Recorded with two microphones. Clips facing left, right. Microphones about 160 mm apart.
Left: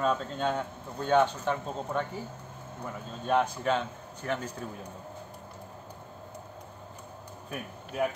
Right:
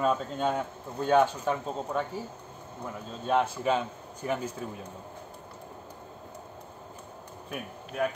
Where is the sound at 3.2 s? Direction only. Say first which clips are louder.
Right 1 dB; 5° right (ahead or behind).